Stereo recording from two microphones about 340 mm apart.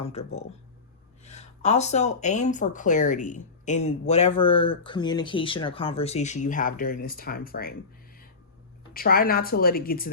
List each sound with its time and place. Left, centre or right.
0.0 s speech: centre
8.9 s speech: left